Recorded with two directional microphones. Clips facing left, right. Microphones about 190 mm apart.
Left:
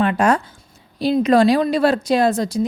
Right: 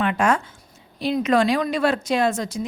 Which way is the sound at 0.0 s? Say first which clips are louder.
Left 4 dB; 35° left (ahead or behind).